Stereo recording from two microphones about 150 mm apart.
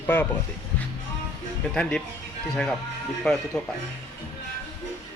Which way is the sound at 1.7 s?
5° left (ahead or behind).